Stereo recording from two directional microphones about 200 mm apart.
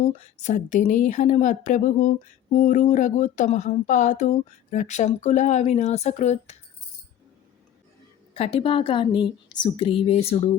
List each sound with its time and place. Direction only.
0.4 s speech: 35° left (ahead or behind)
8.3 s a woman's voice: 30° left (ahead or behind)